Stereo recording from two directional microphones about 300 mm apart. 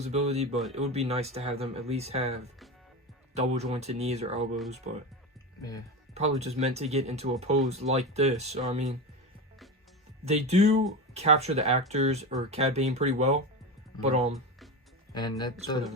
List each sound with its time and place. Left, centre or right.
0.0 s speech: right
6.1 s speech: right
10.2 s speech: right
15.1 s speech: centre